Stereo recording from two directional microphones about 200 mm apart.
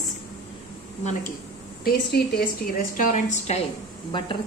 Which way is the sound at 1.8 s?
50° left (ahead or behind).